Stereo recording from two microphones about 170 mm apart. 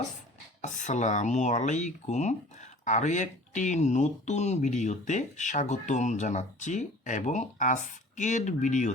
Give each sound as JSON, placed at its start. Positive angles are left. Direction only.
{"t": 0.6, "sound": "speech", "side_deg": 45}